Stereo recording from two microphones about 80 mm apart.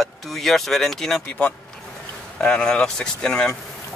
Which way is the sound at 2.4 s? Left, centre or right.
Centre.